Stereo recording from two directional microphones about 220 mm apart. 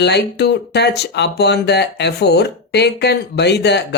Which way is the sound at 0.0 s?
50° left (ahead or behind).